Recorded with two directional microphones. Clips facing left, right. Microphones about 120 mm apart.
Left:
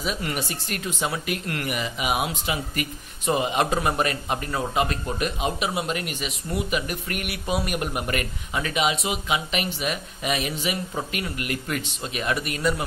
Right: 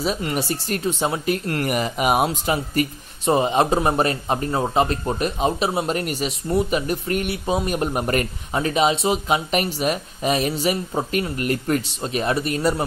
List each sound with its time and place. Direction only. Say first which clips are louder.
0.0 s speech: right 5 dB; 30° right (ahead or behind)